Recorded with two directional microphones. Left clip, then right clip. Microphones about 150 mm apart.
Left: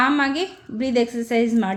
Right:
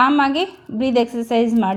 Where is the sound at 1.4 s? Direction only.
10° right (ahead or behind).